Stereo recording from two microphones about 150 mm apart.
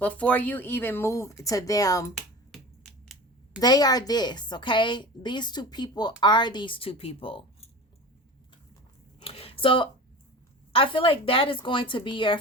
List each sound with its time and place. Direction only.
0.0 s speech: 10° left (ahead or behind)
2.5 s finger snapping: centre (ahead or behind)
3.6 s a woman's voice: 25° left (ahead or behind)
9.2 s a sound: 40° left (ahead or behind)
10.7 s a woman's voice: 35° left (ahead or behind)